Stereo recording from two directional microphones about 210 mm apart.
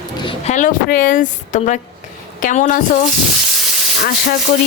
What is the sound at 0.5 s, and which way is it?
Speech, 40° left (ahead or behind).